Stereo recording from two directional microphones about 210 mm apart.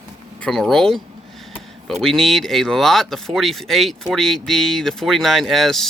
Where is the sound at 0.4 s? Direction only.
5° left (ahead or behind).